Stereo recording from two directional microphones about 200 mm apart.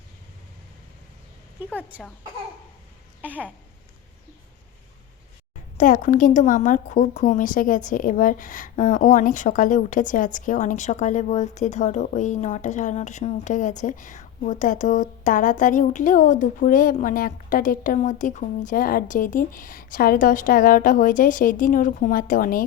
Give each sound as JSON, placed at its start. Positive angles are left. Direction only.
{"t": 3.2, "sound": "speech", "side_deg": -5}
{"t": 5.7, "sound": "a woman's voice", "side_deg": 40}